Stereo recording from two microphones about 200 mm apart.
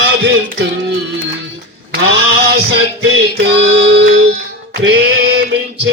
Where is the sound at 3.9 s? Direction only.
60° right (ahead or behind).